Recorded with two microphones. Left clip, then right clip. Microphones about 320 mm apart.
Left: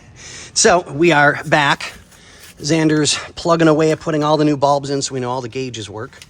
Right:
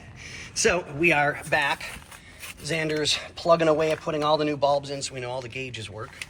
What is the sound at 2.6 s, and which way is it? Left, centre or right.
Speech, left.